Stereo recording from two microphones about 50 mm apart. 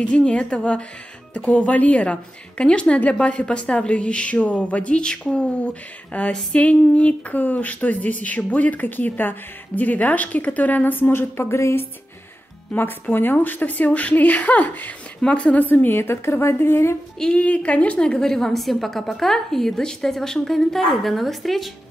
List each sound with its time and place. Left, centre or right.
0.0 s speech: left
12.7 s speech: left
15.7 s a woman's voice: left
17.2 s a woman's voice: left; by 21.6 s centre